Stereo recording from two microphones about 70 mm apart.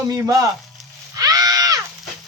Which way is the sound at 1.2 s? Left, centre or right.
Right.